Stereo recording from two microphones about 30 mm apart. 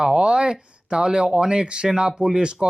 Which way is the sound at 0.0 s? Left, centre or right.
Right.